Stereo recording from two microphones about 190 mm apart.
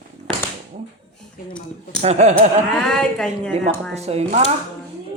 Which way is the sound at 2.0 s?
35° right (ahead or behind).